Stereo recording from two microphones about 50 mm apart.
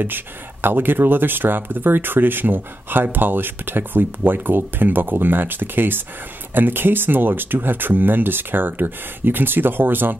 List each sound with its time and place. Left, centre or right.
0.0 s speech: right